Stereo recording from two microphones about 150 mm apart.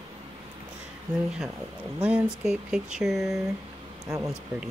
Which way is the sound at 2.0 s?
5° right (ahead or behind).